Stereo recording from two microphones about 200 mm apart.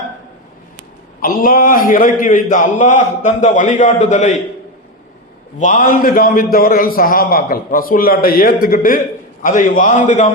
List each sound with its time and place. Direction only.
1.2 s a man's voice: 45° left (ahead or behind)
5.5 s a man's voice: 40° left (ahead or behind)